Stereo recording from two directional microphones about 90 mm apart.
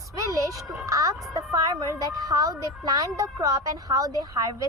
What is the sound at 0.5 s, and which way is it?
Speech, 35° right (ahead or behind).